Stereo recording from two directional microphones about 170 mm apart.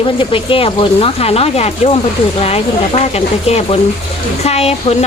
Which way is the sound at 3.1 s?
35° left (ahead or behind).